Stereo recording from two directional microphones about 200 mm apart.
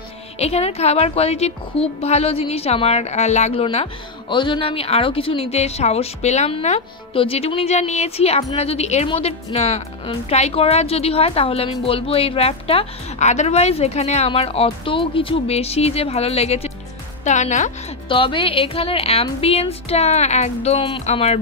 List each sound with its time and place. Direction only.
0.4 s a woman's voice: 30° left (ahead or behind)
18.0 s a woman's voice: 25° left (ahead or behind)